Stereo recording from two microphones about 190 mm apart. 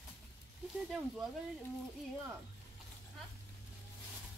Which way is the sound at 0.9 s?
5° right (ahead or behind).